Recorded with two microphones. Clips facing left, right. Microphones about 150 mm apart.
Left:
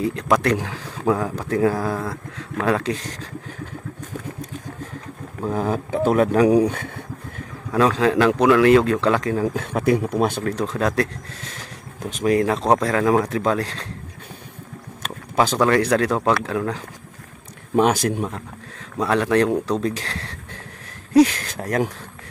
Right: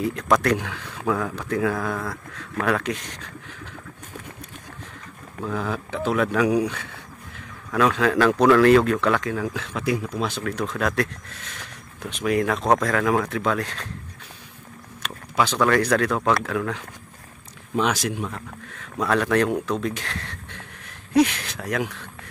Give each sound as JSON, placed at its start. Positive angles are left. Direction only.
{"t": 0.4, "sound": "speech", "side_deg": 30}
{"t": 5.4, "sound": "speech", "side_deg": 40}
{"t": 7.7, "sound": "speech", "side_deg": 25}
{"t": 9.2, "sound": "speech", "side_deg": 35}
{"t": 9.6, "sound": "speech", "side_deg": 50}
{"t": 10.6, "sound": "speech", "side_deg": 25}
{"t": 12.0, "sound": "speech", "side_deg": 40}
{"t": 15.6, "sound": "speech", "side_deg": 25}
{"t": 16.4, "sound": "speech", "side_deg": 30}
{"t": 17.7, "sound": "speech", "side_deg": 50}
{"t": 18.9, "sound": "speech", "side_deg": 25}